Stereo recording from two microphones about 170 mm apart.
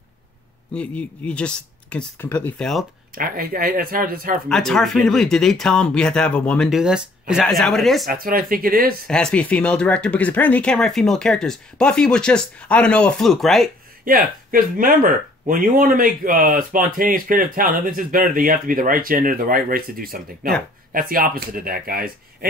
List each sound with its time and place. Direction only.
0.7 s speech: 5° left (ahead or behind)
3.2 s speech: 60° right (ahead or behind)
4.5 s speech: 5° left (ahead or behind)
8.1 s speech: 60° right (ahead or behind)
9.0 s speech: 5° left (ahead or behind)
14.0 s speech: 55° right (ahead or behind)